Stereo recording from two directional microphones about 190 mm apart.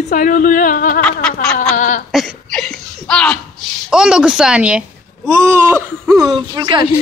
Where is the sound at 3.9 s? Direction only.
5° right (ahead or behind).